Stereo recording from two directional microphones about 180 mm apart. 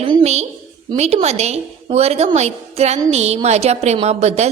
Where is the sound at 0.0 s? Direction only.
30° right (ahead or behind).